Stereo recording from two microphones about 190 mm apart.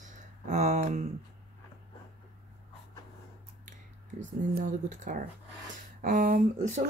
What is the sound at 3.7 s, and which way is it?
Speech, 40° right (ahead or behind).